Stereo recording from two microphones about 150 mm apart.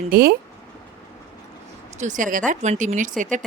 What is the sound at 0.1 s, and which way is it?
Speech, 80° right.